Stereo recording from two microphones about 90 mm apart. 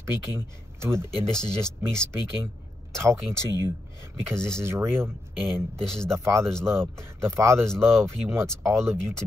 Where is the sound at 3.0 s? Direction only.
30° right (ahead or behind).